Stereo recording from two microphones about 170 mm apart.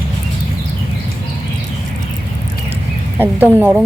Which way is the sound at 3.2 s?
10° right (ahead or behind).